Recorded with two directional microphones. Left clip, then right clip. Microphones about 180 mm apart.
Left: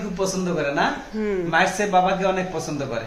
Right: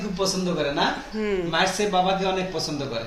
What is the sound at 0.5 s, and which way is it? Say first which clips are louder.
Speech: left 4 dB; 10° left (ahead or behind).